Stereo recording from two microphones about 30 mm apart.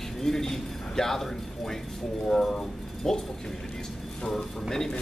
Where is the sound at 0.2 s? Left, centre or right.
Centre.